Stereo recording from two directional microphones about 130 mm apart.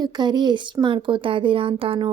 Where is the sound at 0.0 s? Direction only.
35° right (ahead or behind).